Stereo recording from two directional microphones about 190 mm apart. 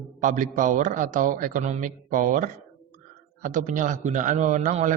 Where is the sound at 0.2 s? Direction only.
40° right (ahead or behind).